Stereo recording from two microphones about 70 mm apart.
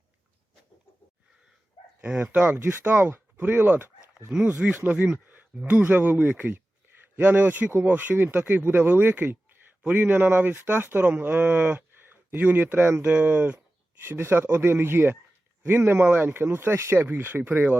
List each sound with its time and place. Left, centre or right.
2.0 s speech: centre
2.2 s speech: right
4.1 s speech: centre